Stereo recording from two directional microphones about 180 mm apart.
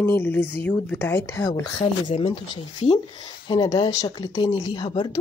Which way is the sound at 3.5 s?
25° left (ahead or behind).